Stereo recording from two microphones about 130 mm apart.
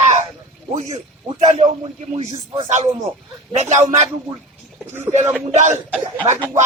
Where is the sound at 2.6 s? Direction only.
65° right (ahead or behind).